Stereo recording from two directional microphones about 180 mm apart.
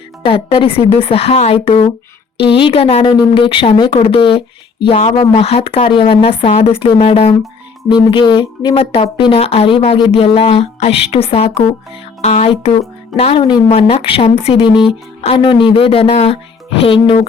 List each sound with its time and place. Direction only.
0.3 s a woman's voice: 30° left (ahead or behind)